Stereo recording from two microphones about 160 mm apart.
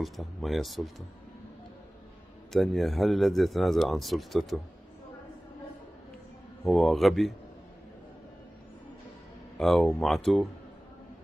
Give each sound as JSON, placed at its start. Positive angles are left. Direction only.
{"t": 0.0, "sound": "speech", "side_deg": 0}
{"t": 2.5, "sound": "speech", "side_deg": 0}
{"t": 6.6, "sound": "speech", "side_deg": 0}
{"t": 9.6, "sound": "speech", "side_deg": 5}